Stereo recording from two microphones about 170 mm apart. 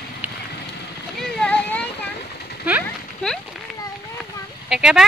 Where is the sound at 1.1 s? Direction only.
5° left (ahead or behind).